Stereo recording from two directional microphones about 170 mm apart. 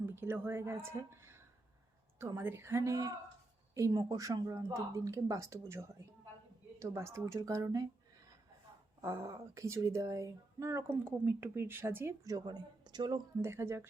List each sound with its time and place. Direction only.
0.0 s a woman's voice: 15° right (ahead or behind)
9.0 s speech: 15° right (ahead or behind)
13.4 s speech: 15° right (ahead or behind)